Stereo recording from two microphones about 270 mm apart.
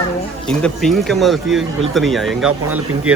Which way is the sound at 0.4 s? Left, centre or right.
Centre.